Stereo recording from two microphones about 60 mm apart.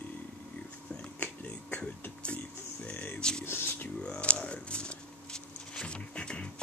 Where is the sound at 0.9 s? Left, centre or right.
Left.